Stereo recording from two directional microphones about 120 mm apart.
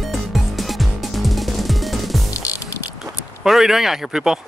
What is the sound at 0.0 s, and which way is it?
Music, centre (ahead or behind).